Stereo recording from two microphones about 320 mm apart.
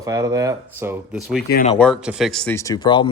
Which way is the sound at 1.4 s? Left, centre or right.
Left.